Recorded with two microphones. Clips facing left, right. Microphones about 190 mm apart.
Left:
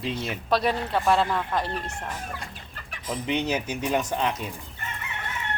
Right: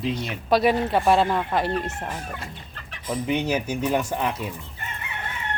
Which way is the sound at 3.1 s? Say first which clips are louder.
Right 3 dB; 10° right (ahead or behind).